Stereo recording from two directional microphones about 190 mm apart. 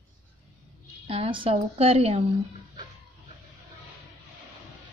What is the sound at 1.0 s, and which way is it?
A woman's voice, 30° right (ahead or behind).